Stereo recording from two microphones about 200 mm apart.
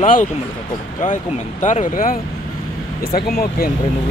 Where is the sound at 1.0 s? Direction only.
35° left (ahead or behind).